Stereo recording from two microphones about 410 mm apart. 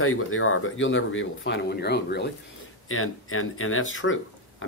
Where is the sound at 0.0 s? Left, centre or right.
Left.